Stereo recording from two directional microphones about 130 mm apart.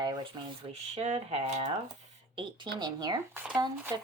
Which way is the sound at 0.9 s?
60° right (ahead or behind).